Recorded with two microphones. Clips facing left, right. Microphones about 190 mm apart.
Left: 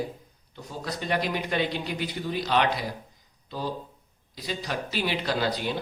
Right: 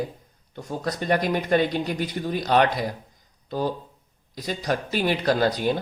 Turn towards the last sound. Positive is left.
turn(degrees=-50)  # may be behind; listen again after turning